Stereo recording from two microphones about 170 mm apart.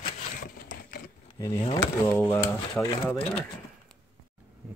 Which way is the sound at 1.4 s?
25° left (ahead or behind).